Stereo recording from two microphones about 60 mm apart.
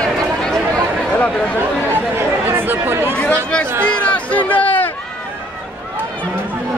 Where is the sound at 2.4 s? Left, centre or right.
Right.